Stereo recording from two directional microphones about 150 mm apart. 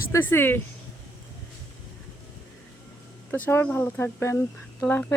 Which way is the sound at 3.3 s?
15° left (ahead or behind).